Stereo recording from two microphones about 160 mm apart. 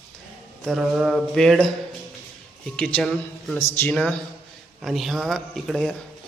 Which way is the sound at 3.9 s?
5° left (ahead or behind).